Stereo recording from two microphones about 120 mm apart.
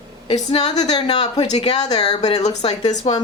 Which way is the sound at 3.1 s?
60° left (ahead or behind).